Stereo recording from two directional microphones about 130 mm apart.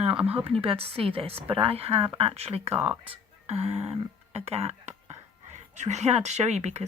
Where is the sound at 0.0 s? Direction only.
50° right (ahead or behind).